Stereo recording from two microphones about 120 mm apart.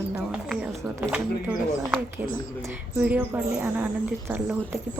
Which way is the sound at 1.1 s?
15° right (ahead or behind).